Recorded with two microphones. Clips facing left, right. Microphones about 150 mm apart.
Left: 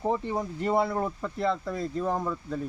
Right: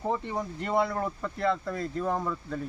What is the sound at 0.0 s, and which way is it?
Speech, 20° left (ahead or behind).